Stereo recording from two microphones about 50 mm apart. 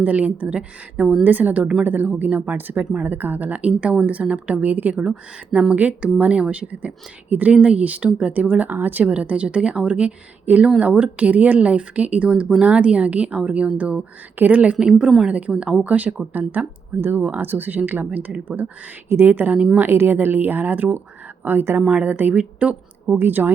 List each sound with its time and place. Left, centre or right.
0.0 s a woman's voice: right
2.8 s a woman's voice: right
3.1 s a woman's voice: right
7.5 s a woman's voice: right
9.0 s a woman's voice: right
10.4 s a woman's voice: right
14.3 s speech: right
14.8 s a woman's voice: centre
15.3 s a woman's voice: right
19.0 s speech: right
21.8 s a woman's voice: right
22.0 s speech: right
22.4 s a woman's voice: right
23.1 s speech: right